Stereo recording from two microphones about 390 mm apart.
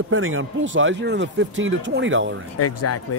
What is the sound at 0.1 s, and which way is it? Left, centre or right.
Speech, right.